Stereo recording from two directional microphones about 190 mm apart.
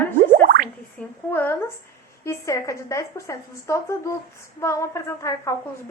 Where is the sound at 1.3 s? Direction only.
10° left (ahead or behind).